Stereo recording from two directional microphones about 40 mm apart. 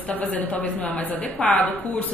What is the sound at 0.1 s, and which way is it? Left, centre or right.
A woman's voice, left.